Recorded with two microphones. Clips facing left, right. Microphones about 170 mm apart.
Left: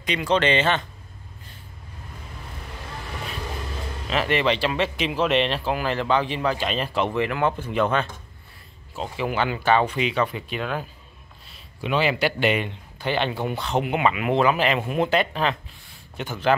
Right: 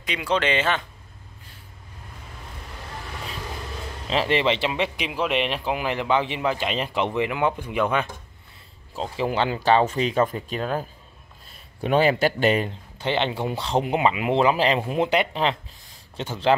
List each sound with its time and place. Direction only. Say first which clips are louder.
0.0 s speech: left 2 dB; 5° right (ahead or behind)
4.1 s speech: right 1 dB; 25° right (ahead or behind)
9.1 s a man's voice: right 1 dB; 30° right (ahead or behind)
13.0 s speech: even; 25° right (ahead or behind)